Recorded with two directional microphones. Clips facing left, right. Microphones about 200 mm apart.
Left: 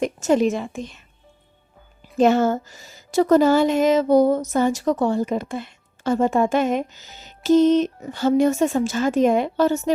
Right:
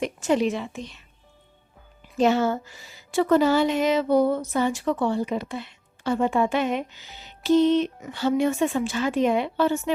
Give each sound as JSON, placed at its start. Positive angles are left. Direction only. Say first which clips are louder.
{"t": 0.0, "sound": "a woman's voice", "louder": "left 4 dB", "side_deg": 45}
{"t": 2.1, "sound": "a woman's voice", "louder": "left 4 dB", "side_deg": 50}